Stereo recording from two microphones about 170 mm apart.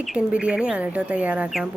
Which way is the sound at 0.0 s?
5° right (ahead or behind).